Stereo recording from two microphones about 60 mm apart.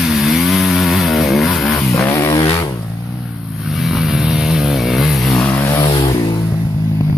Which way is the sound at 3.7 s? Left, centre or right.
Centre.